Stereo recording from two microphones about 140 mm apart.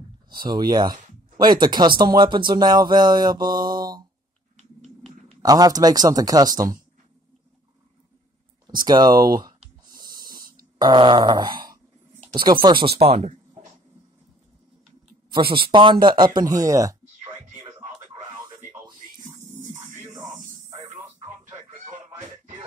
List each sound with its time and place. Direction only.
0.3 s speech: 35° right (ahead or behind)
5.4 s speech: 25° right (ahead or behind)
8.8 s speech: 30° right (ahead or behind)
9.9 s a sound: 30° right (ahead or behind)
10.4 s a sound: 90° right
10.8 s groan: 30° right (ahead or behind)
12.6 s speech: 35° right (ahead or behind)
13.0 s speech: 50° right (ahead or behind)
15.3 s speech: 35° right (ahead or behind)
17.6 s a sound: 20° right (ahead or behind)
19.7 s music: 60° right (ahead or behind)